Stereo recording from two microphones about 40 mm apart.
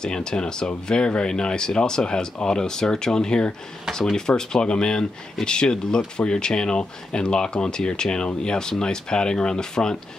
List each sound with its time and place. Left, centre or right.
0.0 s speech: centre